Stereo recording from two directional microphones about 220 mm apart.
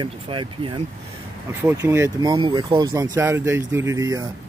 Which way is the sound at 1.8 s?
10° right (ahead or behind).